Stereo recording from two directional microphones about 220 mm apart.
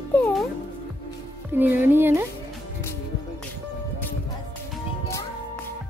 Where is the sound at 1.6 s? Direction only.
10° right (ahead or behind).